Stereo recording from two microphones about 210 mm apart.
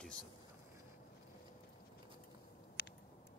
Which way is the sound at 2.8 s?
50° left (ahead or behind).